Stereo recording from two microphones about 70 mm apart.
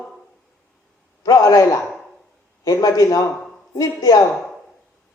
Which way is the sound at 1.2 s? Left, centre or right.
Left.